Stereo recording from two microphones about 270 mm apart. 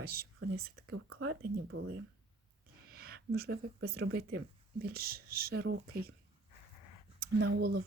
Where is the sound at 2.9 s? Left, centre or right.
Right.